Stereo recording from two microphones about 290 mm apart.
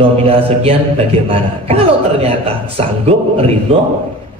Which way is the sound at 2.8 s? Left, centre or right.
Right.